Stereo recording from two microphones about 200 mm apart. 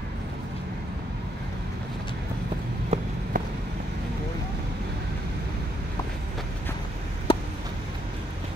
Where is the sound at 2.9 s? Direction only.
30° right (ahead or behind).